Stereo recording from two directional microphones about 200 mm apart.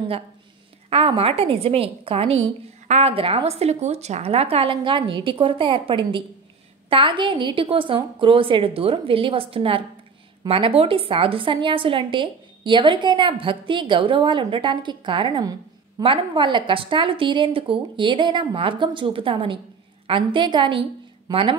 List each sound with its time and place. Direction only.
0.8 s a woman's voice: 30° right (ahead or behind)